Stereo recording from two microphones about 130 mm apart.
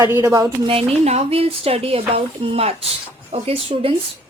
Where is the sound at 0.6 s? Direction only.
50° right (ahead or behind).